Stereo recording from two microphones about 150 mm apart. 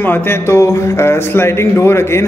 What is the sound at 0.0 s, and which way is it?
Speech, 15° left (ahead or behind).